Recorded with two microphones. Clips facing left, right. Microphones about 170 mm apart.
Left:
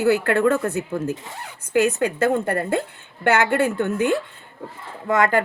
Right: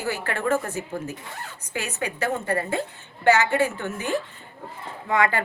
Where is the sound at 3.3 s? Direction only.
55° left (ahead or behind).